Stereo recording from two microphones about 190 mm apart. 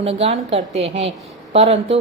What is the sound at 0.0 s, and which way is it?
A woman's voice, 30° right (ahead or behind).